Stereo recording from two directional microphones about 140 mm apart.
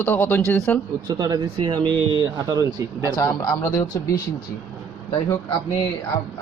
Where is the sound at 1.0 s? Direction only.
25° right (ahead or behind).